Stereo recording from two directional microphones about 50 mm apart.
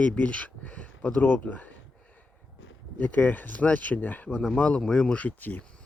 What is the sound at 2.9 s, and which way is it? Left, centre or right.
Speech, left.